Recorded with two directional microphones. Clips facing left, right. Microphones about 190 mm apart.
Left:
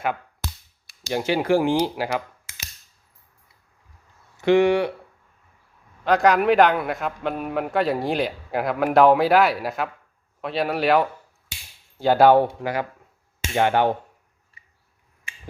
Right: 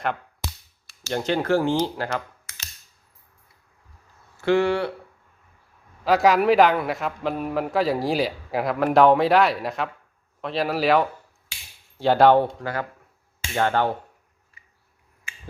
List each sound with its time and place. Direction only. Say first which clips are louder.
1.0 s speech: left 1 dB; 10° left (ahead or behind)
4.4 s speech: left 3 dB; 15° left (ahead or behind)
6.1 s a man's voice: even; centre (ahead or behind)
12.5 s speech: left 3 dB; 15° left (ahead or behind)